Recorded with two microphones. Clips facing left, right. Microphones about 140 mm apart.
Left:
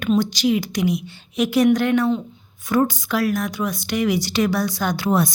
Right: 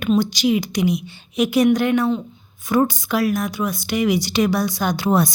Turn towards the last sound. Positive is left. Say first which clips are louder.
# right 1 dB
turn(degrees=-35)  # may be behind; listen again after turning